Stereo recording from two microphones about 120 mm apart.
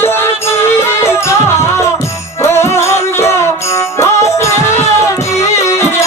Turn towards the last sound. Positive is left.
turn(degrees=20)  # may be behind; listen again after turning